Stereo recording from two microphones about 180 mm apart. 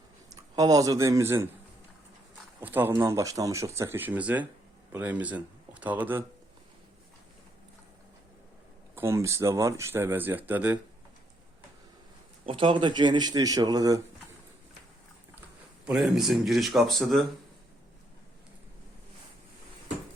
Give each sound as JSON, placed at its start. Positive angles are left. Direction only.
{"t": 0.5, "sound": "speech", "side_deg": -20}
{"t": 2.6, "sound": "a man's voice", "side_deg": -10}
{"t": 9.0, "sound": "speech", "side_deg": -15}
{"t": 12.5, "sound": "speech", "side_deg": -30}
{"t": 15.9, "sound": "speech", "side_deg": -5}